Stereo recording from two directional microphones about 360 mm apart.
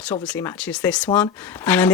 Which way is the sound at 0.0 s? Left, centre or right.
Centre.